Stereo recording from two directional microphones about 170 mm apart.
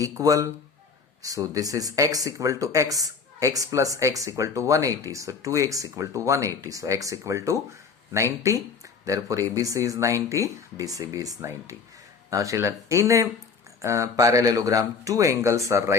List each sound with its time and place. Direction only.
0.0 s speech: 20° right (ahead or behind)